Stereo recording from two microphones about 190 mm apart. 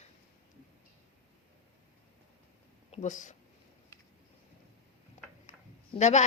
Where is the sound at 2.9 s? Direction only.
40° left (ahead or behind).